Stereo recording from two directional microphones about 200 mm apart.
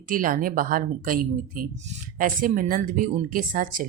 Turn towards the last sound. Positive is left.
turn(degrees=-45)  # may be behind; listen again after turning